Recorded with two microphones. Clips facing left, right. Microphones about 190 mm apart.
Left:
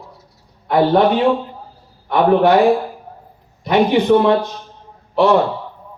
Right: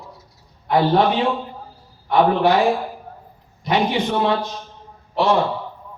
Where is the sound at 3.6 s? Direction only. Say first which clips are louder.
Left 6 dB; 55° left (ahead or behind).